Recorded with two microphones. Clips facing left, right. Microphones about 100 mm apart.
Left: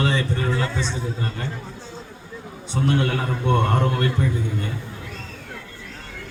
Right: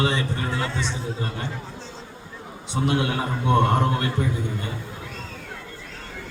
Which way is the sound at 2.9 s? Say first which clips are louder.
Left 2 dB; 15° right (ahead or behind).